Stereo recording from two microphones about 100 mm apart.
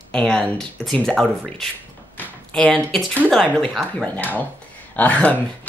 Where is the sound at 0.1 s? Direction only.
10° left (ahead or behind).